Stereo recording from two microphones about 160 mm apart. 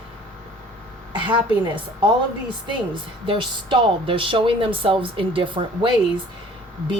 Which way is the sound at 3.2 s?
30° right (ahead or behind).